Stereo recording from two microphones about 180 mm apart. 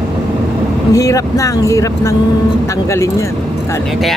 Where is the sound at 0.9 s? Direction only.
20° left (ahead or behind).